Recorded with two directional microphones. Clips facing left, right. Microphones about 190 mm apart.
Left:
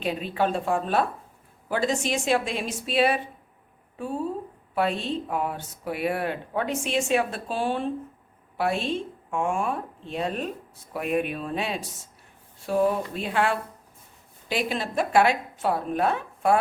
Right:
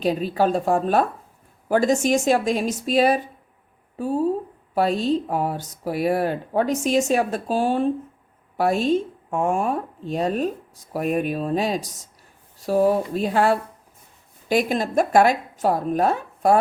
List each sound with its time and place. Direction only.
0.0 s speech: 40° right (ahead or behind)